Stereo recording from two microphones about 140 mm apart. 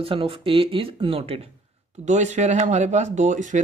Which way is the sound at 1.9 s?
60° right (ahead or behind).